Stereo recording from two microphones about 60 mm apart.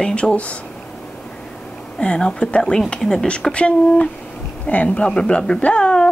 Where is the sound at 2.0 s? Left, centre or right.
Centre.